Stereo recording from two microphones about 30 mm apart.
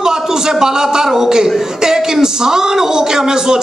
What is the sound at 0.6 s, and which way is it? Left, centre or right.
A man's voice, centre.